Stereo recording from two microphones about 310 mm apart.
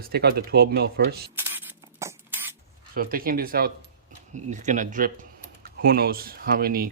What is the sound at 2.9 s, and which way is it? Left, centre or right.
Speech, right.